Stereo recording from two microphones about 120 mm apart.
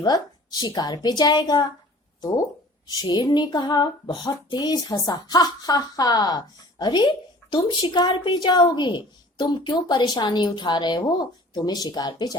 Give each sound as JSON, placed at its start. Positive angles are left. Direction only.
{"t": 0.0, "sound": "a woman's voice", "side_deg": 35}
{"t": 2.8, "sound": "a woman's voice", "side_deg": 35}